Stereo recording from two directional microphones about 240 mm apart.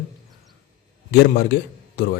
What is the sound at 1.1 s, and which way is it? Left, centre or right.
Speech, left.